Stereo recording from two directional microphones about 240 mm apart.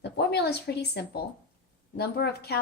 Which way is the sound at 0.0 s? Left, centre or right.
Left.